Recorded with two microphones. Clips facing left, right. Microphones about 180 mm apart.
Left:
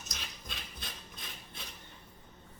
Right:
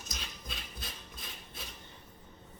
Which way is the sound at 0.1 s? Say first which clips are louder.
Right 2 dB; centre (ahead or behind).